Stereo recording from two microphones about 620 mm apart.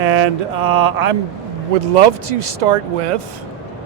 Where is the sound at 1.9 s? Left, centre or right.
Right.